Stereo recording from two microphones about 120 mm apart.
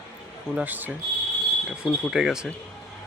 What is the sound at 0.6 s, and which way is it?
Speech, 15° right (ahead or behind).